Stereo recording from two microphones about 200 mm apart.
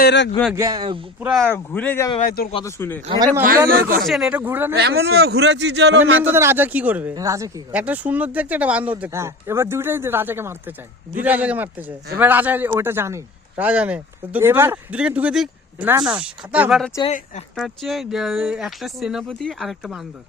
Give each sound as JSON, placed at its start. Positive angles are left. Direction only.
{"t": 0.0, "sound": "a man's voice", "side_deg": 60}
{"t": 0.5, "sound": "speech", "side_deg": -15}
{"t": 1.2, "sound": "speech", "side_deg": 0}
{"t": 1.5, "sound": "speech", "side_deg": 10}
{"t": 2.2, "sound": "speech", "side_deg": 45}
{"t": 2.6, "sound": "speech", "side_deg": 10}
{"t": 3.7, "sound": "speech", "side_deg": -45}
{"t": 4.1, "sound": "speech", "side_deg": -5}
{"t": 4.7, "sound": "a man's voice", "side_deg": -55}
{"t": 6.2, "sound": "speech", "side_deg": -10}
{"t": 17.1, "sound": "speech", "side_deg": 35}
{"t": 17.5, "sound": "speech", "side_deg": 0}